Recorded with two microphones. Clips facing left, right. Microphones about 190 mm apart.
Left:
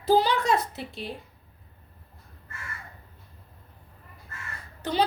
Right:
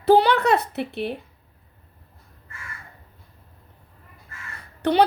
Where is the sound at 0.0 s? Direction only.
65° right (ahead or behind).